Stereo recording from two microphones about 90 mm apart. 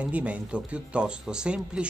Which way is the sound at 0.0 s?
15° right (ahead or behind).